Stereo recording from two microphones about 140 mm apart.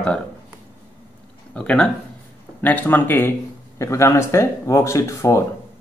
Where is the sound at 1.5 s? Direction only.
5° left (ahead or behind).